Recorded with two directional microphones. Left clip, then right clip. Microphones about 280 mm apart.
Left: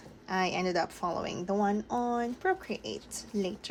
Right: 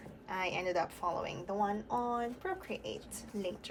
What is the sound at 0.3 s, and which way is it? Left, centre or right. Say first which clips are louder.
A woman's voice: left 5 dB; centre.